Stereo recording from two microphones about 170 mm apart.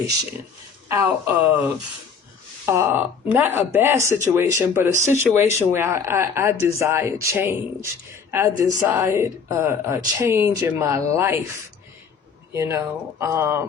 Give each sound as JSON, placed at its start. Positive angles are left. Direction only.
{"t": 0.9, "sound": "a woman's voice", "side_deg": -15}
{"t": 12.5, "sound": "a woman's voice", "side_deg": -15}